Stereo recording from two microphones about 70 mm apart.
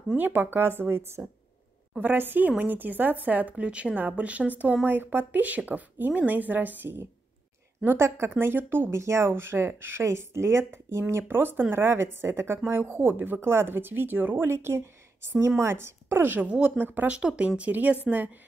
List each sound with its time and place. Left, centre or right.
0.1 s speech: right
2.0 s speech: right
8.3 s speech: right
16.4 s speech: centre
17.2 s speech: centre